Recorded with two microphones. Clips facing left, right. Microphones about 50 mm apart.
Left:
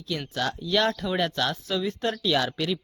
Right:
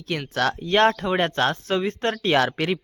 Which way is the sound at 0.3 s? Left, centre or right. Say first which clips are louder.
Right 6 dB; right.